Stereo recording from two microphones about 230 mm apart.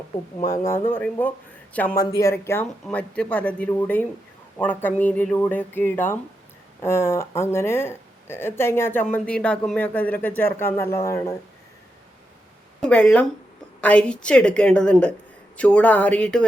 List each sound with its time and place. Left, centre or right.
0.4 s speech: left
0.9 s speech: centre
12.8 s a woman's voice: centre